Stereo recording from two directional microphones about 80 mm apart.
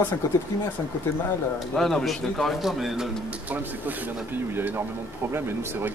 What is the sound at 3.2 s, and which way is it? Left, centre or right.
Speech, right.